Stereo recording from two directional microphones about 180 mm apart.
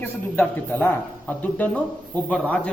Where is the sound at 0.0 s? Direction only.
10° left (ahead or behind).